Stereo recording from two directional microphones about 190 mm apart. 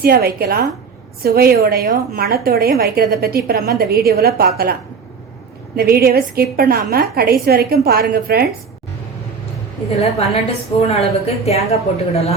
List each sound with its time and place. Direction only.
0.0 s a woman's voice: 55° right (ahead or behind)
10.0 s a woman's voice: 30° left (ahead or behind)